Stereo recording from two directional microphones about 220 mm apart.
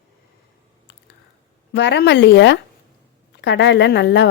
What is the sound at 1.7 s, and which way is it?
Speech, 50° left (ahead or behind).